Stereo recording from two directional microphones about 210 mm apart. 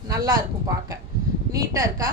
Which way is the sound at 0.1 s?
15° right (ahead or behind).